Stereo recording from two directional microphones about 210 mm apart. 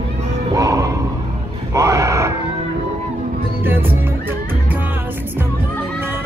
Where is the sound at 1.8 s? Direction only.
15° right (ahead or behind).